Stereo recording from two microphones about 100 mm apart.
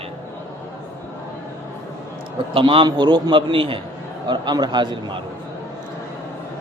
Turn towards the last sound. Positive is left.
turn(degrees=-50)  # may be behind; listen again after turning